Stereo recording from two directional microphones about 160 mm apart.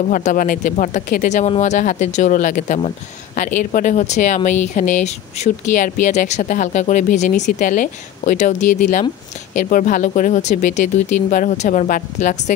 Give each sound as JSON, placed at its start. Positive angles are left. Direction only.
{"t": 0.0, "sound": "speech", "side_deg": 50}